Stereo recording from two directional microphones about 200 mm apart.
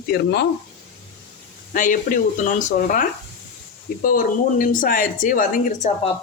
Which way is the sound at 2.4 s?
40° left (ahead or behind).